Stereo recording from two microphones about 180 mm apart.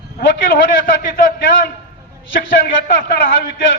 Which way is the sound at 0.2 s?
55° left (ahead or behind).